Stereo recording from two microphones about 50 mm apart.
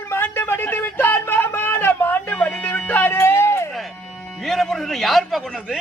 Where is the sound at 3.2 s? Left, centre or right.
Left.